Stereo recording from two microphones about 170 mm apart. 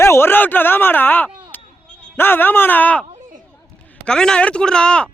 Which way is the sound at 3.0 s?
40° right (ahead or behind).